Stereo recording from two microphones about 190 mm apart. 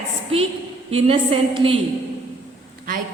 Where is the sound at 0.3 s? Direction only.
30° right (ahead or behind).